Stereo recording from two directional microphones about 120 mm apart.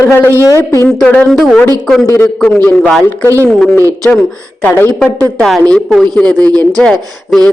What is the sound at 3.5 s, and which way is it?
Speech, 5° left (ahead or behind).